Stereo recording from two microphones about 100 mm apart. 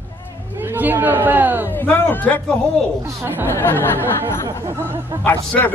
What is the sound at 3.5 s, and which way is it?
Speech, 20° left (ahead or behind).